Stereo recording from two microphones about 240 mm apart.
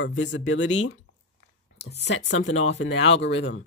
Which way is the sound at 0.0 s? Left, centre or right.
Left.